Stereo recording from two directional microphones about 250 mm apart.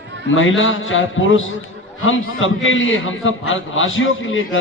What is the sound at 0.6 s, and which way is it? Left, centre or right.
A man's voice, left.